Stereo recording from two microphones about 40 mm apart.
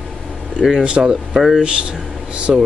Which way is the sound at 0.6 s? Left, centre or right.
Centre.